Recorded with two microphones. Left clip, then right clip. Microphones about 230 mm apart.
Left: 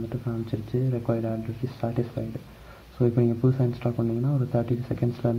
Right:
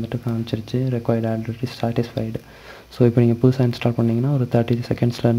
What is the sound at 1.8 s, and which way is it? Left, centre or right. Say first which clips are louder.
Speech: right 6 dB; right.